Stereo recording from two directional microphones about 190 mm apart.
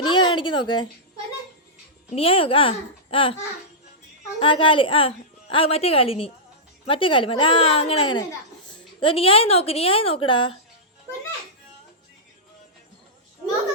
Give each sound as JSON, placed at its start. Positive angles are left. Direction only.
{"t": 0.0, "sound": "speech", "side_deg": 25}
{"t": 2.1, "sound": "a woman's voice", "side_deg": 30}
{"t": 4.4, "sound": "a woman's voice", "side_deg": 30}